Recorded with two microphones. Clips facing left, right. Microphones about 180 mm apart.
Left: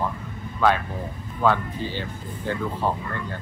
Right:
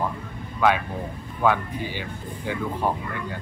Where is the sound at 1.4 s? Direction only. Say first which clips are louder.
Even; 15° right (ahead or behind).